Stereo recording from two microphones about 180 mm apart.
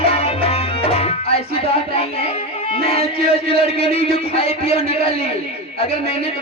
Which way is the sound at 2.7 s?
35° left (ahead or behind).